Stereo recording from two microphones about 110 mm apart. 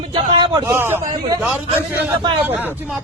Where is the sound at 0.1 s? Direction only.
45° right (ahead or behind).